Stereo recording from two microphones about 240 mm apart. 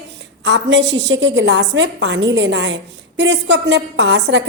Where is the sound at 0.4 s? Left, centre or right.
Right.